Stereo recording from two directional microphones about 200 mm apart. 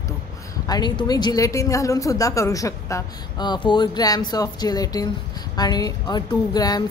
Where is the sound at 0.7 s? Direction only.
20° left (ahead or behind).